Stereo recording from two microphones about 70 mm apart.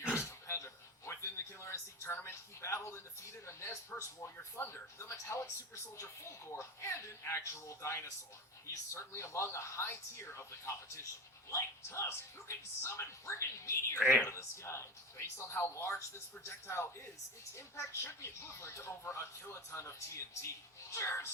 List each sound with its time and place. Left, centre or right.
0.0 s a sound: centre
0.3 s a sound: left
4.5 s speech: left
4.9 s speech: left
14.0 s a woman's voice: centre
14.3 s speech: left